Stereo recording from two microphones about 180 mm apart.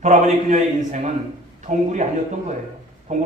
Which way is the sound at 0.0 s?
40° right (ahead or behind).